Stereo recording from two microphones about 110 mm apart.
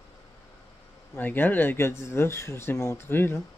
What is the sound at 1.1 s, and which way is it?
Speech, 15° left (ahead or behind).